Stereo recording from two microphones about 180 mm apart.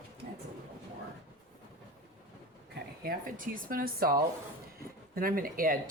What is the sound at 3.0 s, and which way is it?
Speech, 50° right (ahead or behind).